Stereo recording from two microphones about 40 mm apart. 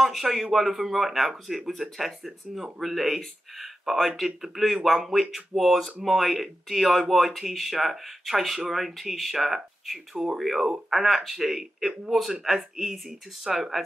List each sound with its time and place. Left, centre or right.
0.0 s a man's voice: centre